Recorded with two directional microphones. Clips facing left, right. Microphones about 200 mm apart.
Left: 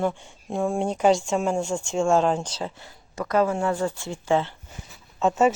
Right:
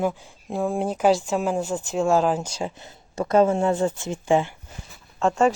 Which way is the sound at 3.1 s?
25° right (ahead or behind).